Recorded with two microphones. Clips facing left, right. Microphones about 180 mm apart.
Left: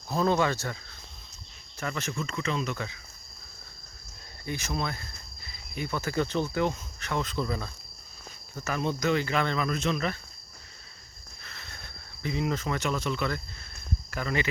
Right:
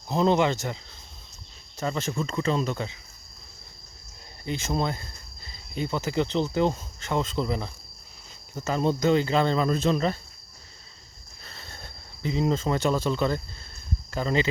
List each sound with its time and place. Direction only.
0.1 s speech: 20° right (ahead or behind)
4.4 s cricket: 25° right (ahead or behind)
8.5 s speech: 25° right (ahead or behind)
11.4 s cricket: 30° right (ahead or behind)
14.1 s speech: 25° right (ahead or behind)